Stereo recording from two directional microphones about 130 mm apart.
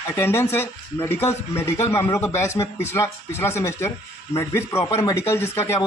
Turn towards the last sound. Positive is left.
turn(degrees=20)  # may be behind; listen again after turning